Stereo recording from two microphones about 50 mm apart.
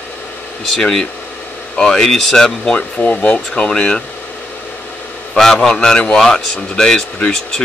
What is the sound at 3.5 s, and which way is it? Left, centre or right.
Speech, centre.